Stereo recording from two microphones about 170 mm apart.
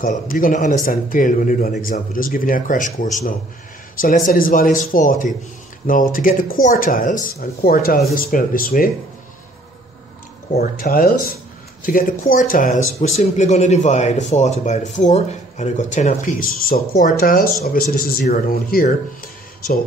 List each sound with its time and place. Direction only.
0.0 s speech: 55° left (ahead or behind)
10.6 s speech: 60° left (ahead or behind)